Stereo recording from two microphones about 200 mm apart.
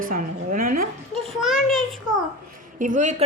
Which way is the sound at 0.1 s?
45° right (ahead or behind).